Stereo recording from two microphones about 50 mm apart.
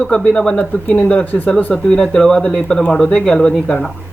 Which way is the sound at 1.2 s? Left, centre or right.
Left.